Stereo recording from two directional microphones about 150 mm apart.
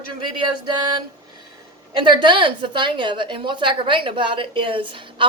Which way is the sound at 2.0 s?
30° right (ahead or behind).